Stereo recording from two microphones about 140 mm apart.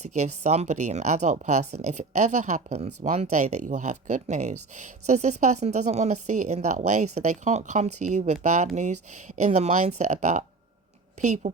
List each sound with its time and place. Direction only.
0.0 s speech: 55° right (ahead or behind)